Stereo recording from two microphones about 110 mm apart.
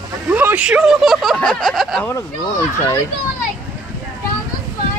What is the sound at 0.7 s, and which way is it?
Speech, 5° right (ahead or behind).